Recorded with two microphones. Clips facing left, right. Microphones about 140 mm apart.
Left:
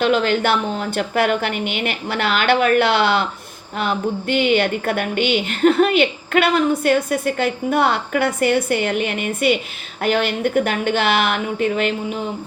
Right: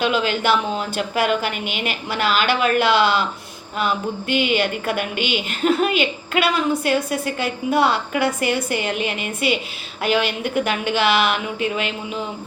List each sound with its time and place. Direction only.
0.0 s a woman's voice: 50° left (ahead or behind)